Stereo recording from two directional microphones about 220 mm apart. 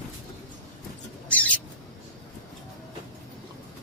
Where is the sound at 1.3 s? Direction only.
5° left (ahead or behind).